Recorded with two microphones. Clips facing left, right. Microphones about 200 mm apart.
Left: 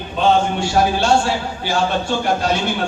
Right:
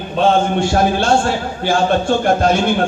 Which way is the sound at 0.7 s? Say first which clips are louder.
Left 1 dB; 50° right (ahead or behind).